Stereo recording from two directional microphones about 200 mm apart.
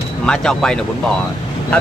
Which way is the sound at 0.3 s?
5° left (ahead or behind).